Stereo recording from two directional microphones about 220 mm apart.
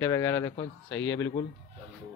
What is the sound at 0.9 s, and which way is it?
Speech, 60° left (ahead or behind).